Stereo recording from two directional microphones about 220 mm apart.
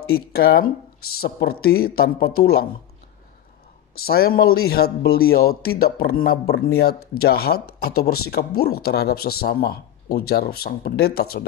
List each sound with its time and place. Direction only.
0.1 s speech: 45° left (ahead or behind)
3.9 s speech: 45° left (ahead or behind)